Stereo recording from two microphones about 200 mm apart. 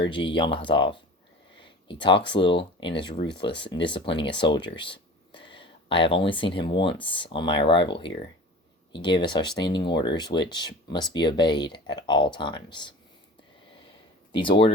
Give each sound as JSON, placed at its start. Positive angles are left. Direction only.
{"t": 0.0, "sound": "speech", "side_deg": 25}
{"t": 14.3, "sound": "speech", "side_deg": 25}